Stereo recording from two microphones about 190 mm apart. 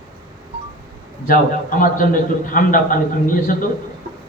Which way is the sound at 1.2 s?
45° left (ahead or behind).